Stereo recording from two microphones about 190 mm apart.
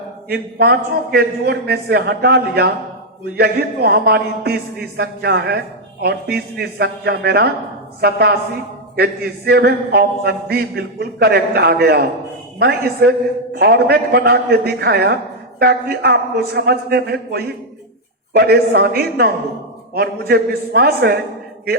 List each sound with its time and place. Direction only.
0.3 s a man's voice: 55° right (ahead or behind)